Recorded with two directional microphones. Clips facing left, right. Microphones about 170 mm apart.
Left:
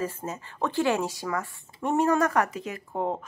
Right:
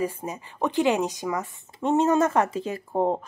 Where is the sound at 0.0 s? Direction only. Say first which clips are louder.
Right 3 dB; 15° right (ahead or behind).